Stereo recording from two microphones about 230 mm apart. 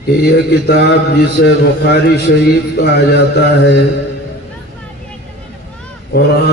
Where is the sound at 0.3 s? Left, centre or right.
Left.